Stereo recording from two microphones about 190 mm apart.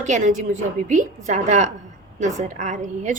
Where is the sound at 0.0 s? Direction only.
40° right (ahead or behind).